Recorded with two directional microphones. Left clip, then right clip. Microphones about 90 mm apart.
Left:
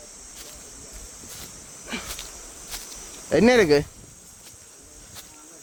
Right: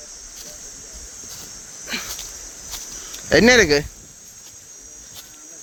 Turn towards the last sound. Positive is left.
turn(degrees=15)  # may be behind; listen again after turning